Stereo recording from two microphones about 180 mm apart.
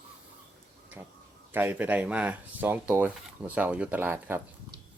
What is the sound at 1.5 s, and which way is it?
Speech, 10° right (ahead or behind).